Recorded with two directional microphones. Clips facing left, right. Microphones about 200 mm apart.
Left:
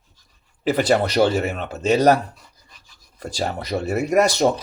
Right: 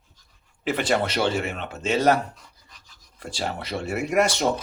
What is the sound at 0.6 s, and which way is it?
Speech, 40° left (ahead or behind).